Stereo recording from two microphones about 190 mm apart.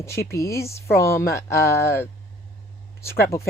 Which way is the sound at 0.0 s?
15° left (ahead or behind).